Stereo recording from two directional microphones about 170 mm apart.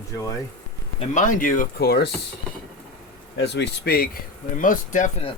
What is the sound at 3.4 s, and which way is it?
Speech, 85° left.